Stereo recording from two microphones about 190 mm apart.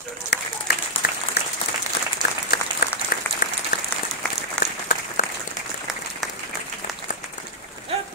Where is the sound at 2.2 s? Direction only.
20° right (ahead or behind).